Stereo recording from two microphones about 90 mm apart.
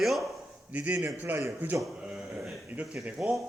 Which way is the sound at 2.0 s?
10° right (ahead or behind).